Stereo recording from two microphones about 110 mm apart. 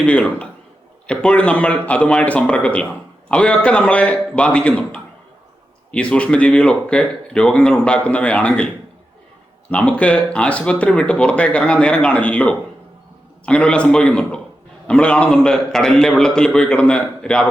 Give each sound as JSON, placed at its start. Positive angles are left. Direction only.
{"t": 0.0, "sound": "a man's voice", "side_deg": 10}